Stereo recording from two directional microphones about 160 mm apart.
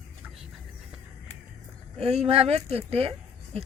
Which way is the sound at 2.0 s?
40° right (ahead or behind).